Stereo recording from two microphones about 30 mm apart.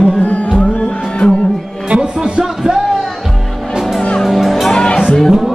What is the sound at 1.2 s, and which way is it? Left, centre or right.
Music, left.